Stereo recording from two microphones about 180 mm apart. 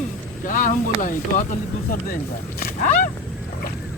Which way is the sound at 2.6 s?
45° left (ahead or behind).